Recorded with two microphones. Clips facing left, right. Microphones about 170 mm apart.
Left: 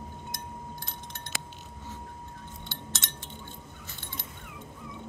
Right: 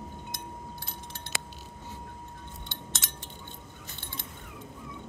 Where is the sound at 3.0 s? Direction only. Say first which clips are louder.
Left 1 dB; 5° right (ahead or behind).